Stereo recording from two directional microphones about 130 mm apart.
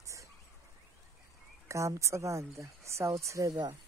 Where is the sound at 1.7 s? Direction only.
25° right (ahead or behind).